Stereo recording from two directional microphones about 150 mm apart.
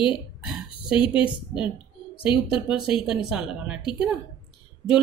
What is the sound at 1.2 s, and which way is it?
A woman's voice, 5° right (ahead or behind).